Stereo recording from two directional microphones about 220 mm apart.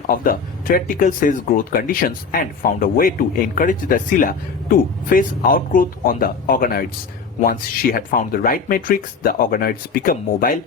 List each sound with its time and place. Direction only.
0.1 s speech: 40° left (ahead or behind)